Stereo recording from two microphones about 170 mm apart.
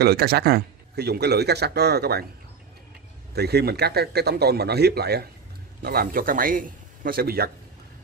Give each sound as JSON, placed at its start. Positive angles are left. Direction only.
{"t": 0.0, "sound": "a man's voice", "side_deg": -70}
{"t": 3.3, "sound": "a man's voice", "side_deg": -75}